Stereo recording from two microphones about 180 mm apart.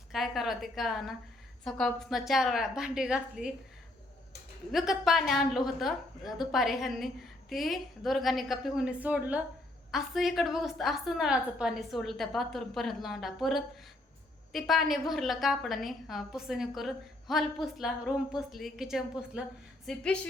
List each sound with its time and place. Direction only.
0.1 s a woman's voice: centre (ahead or behind)
4.7 s a woman's voice: centre (ahead or behind)